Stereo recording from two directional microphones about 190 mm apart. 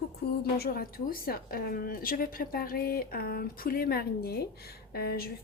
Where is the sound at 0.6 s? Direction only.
50° left (ahead or behind).